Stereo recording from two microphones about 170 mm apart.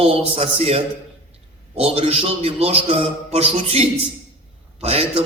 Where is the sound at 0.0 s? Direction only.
35° right (ahead or behind).